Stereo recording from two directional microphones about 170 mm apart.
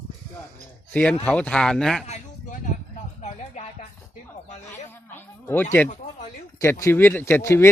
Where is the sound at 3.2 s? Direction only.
45° left (ahead or behind).